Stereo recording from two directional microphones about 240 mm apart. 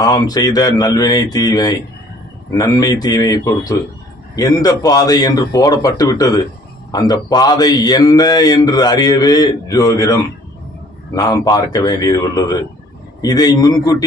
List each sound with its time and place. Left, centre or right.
0.0 s speech: centre